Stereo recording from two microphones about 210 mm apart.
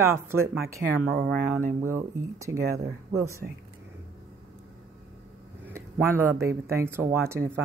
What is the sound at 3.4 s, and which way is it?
Speech, 45° right (ahead or behind).